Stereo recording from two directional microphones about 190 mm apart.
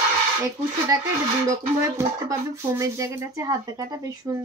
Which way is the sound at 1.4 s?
15° right (ahead or behind).